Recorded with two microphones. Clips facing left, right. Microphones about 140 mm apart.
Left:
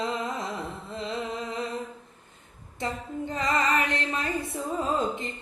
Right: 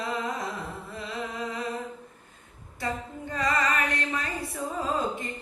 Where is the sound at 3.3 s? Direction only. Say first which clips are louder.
Left 1 dB; 20° left (ahead or behind).